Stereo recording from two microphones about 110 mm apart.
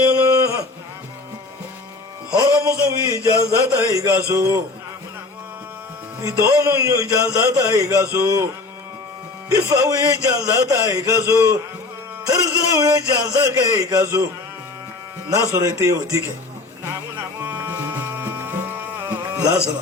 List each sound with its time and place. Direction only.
0.0 s a sound: 25° right (ahead or behind)
2.3 s a man's voice: 30° right (ahead or behind)
6.2 s a man's voice: 30° right (ahead or behind)
9.5 s a man's voice: 30° right (ahead or behind)
15.3 s a man's voice: 30° right (ahead or behind)
17.4 s music: 20° right (ahead or behind)